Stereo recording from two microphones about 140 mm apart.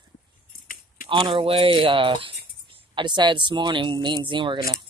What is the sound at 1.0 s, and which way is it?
Speech, 35° right (ahead or behind).